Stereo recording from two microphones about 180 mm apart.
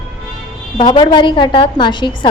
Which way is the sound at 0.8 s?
25° left (ahead or behind).